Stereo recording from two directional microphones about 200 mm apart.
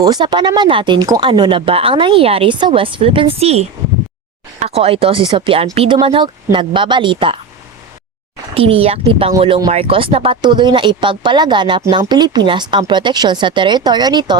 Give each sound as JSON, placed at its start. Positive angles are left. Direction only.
{"t": 0.0, "sound": "speech", "side_deg": -20}
{"t": 8.5, "sound": "speech", "side_deg": -30}